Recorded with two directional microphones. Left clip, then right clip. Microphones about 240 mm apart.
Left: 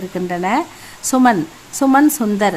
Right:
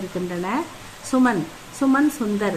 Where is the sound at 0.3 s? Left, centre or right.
Left.